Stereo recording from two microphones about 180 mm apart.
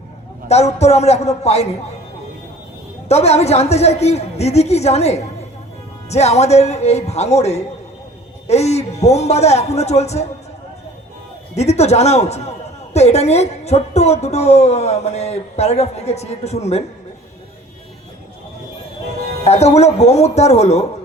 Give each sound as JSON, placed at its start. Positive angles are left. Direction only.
{"t": 0.4, "sound": "a woman's voice", "side_deg": 35}
{"t": 3.1, "sound": "a woman's voice", "side_deg": 35}
{"t": 11.5, "sound": "a woman's voice", "side_deg": 35}
{"t": 19.5, "sound": "a woman's voice", "side_deg": 35}